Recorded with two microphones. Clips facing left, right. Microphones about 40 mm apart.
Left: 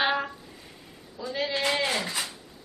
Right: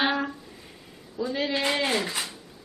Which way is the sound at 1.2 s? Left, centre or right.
Centre.